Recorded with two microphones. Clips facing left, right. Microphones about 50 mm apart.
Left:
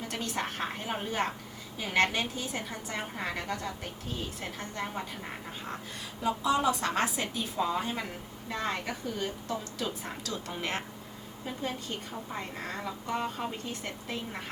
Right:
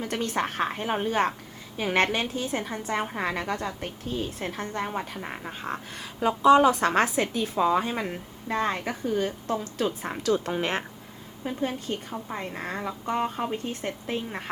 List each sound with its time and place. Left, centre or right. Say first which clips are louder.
0.1 s a woman's voice: right 6 dB; right
6.2 s a woman's voice: right 9 dB; right